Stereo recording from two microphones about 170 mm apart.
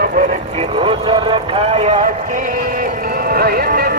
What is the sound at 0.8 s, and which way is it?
Music, 30° right (ahead or behind).